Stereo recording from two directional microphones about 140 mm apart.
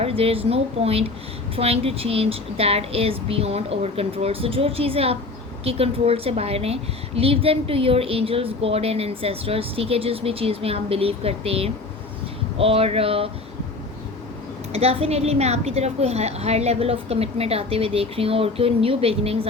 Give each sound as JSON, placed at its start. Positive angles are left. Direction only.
{"t": 0.0, "sound": "a woman's voice", "side_deg": -45}
{"t": 14.7, "sound": "a woman's voice", "side_deg": -45}